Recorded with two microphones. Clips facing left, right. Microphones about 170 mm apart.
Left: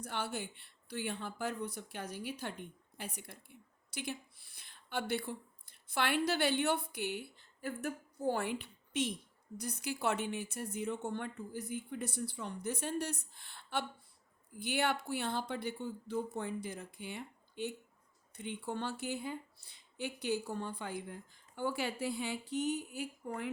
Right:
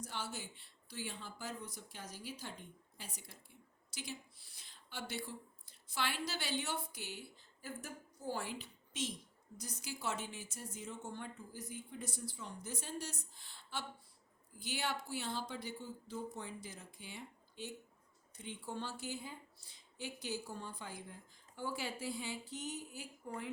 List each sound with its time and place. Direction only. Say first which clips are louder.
0.0 s a woman's voice: left 6 dB; 60° left (ahead or behind)